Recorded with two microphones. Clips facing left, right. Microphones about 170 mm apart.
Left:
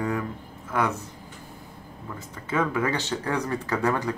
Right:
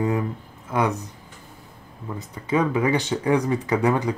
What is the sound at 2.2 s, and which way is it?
Speech, 15° right (ahead or behind).